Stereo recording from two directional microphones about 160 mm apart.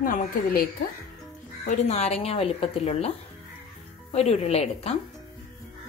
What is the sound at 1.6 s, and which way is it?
A woman's voice, 40° left (ahead or behind).